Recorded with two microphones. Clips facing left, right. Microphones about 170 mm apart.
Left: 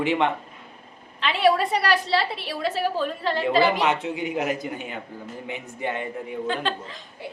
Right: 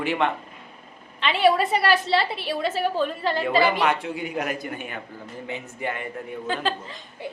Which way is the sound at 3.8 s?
20° left (ahead or behind).